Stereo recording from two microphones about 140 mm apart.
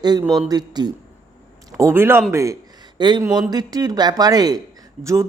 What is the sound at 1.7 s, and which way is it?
Speech, 20° right (ahead or behind).